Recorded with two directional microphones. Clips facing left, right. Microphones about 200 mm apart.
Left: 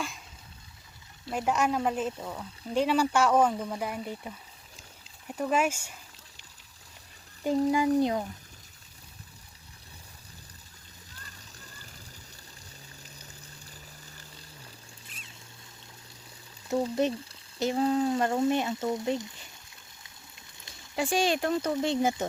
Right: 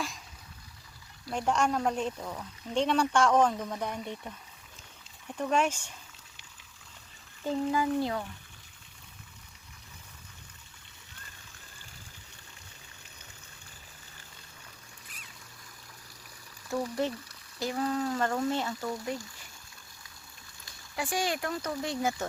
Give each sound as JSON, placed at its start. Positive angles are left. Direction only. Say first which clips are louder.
{"t": 1.3, "sound": "speech", "louder": "left 1 dB", "side_deg": 5}
{"t": 7.4, "sound": "speech", "louder": "left 4 dB", "side_deg": 15}
{"t": 15.0, "sound": "a sound", "louder": "left 2 dB", "side_deg": 25}
{"t": 16.6, "sound": "speech", "louder": "left 4 dB", "side_deg": 25}
{"t": 20.7, "sound": "speech", "louder": "left 5 dB", "side_deg": 25}